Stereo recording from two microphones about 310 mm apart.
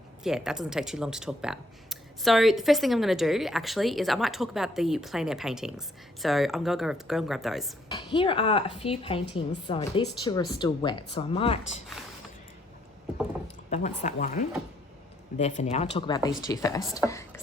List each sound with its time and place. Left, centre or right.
0.2 s speech: centre
7.9 s speech: centre
13.7 s speech: left